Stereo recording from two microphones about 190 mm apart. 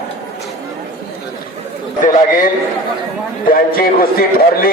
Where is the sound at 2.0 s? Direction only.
40° left (ahead or behind).